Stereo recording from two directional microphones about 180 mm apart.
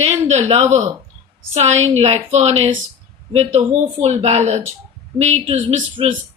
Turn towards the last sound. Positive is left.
turn(degrees=-30)  # may be behind; listen again after turning